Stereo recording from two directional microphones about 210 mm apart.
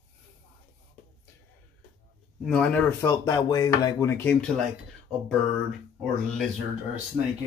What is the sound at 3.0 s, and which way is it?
Speech, 20° left (ahead or behind).